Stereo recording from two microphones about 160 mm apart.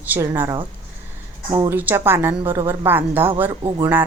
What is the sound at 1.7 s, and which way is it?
Speech, 10° right (ahead or behind).